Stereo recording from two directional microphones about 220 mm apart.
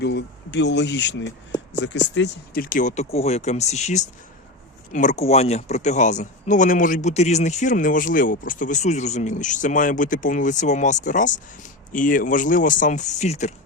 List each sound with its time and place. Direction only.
0.0 s speech: 50° left (ahead or behind); by 13.5 s 30° left (ahead or behind)